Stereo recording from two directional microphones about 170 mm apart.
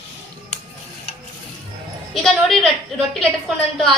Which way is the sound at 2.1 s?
Centre (ahead or behind).